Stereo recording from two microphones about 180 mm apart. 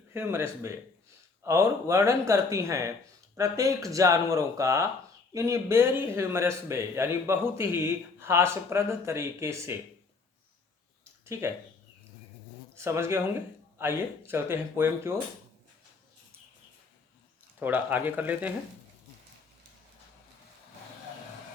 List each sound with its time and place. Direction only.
0.1 s a man's voice: 15° right (ahead or behind)
11.3 s a man's voice: 15° right (ahead or behind)
12.7 s a man's voice: 15° right (ahead or behind)
17.6 s a man's voice: 10° right (ahead or behind)